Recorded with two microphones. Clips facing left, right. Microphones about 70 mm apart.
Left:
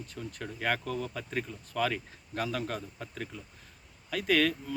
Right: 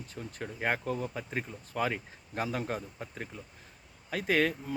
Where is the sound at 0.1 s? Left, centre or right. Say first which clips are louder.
Right 2 dB; right.